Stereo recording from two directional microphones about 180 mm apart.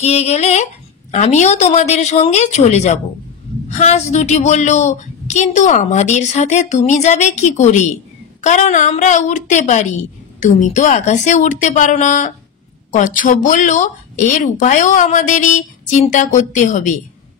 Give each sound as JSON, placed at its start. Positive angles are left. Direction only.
{"t": 0.0, "sound": "a woman's voice", "side_deg": 35}